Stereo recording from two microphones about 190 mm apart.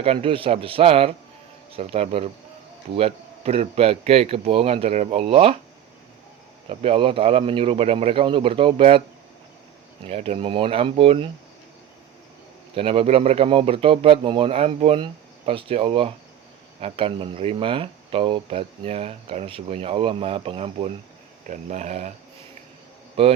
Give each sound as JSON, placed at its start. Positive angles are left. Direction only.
{"t": 0.0, "sound": "speech", "side_deg": -30}
{"t": 6.7, "sound": "speech", "side_deg": -30}
{"t": 10.1, "sound": "speech", "side_deg": -30}
{"t": 12.7, "sound": "speech", "side_deg": -30}
{"t": 21.4, "sound": "speech", "side_deg": -40}
{"t": 23.2, "sound": "speech", "side_deg": -30}